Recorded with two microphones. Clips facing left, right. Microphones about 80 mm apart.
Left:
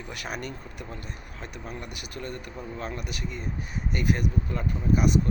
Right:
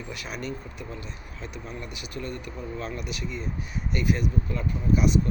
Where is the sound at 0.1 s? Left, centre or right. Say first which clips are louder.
Even; left.